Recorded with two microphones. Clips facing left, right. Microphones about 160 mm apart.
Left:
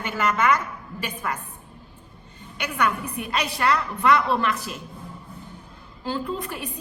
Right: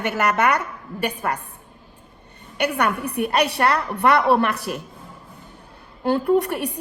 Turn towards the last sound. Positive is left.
turn(degrees=-70)  # may be behind; listen again after turning